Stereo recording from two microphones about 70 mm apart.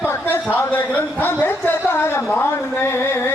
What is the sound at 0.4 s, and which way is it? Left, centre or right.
Speech, left.